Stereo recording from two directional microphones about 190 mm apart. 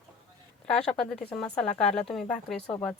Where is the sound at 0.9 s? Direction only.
5° left (ahead or behind).